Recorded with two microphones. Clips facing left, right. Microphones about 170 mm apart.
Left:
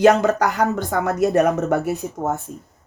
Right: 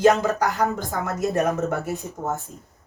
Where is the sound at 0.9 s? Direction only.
65° left (ahead or behind).